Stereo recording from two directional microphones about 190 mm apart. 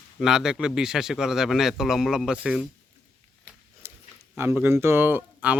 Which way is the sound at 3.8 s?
10° right (ahead or behind).